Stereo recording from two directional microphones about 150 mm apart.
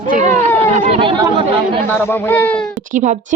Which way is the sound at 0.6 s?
40° right (ahead or behind).